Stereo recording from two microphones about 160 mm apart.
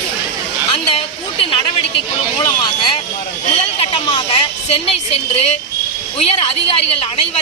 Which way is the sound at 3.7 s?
30° left (ahead or behind).